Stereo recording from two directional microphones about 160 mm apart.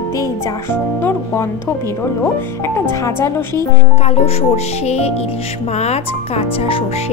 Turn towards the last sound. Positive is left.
turn(degrees=40)  # may be behind; listen again after turning